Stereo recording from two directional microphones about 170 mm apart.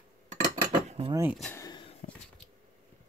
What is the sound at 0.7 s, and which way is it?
Cutlery, 40° right (ahead or behind).